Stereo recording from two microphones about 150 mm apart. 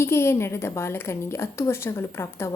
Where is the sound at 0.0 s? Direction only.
15° left (ahead or behind).